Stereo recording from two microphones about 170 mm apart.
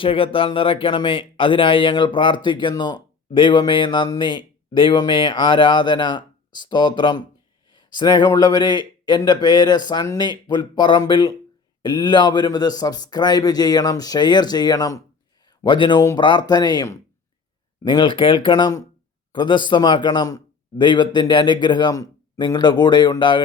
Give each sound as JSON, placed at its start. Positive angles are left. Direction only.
{"t": 0.0, "sound": "speech", "side_deg": 30}